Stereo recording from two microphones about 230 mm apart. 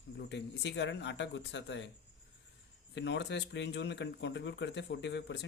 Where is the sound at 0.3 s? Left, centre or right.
Left.